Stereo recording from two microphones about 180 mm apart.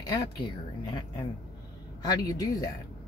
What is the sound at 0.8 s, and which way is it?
Speech, 25° left (ahead or behind).